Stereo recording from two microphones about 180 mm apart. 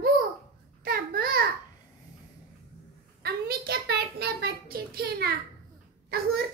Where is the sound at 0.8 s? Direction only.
55° right (ahead or behind).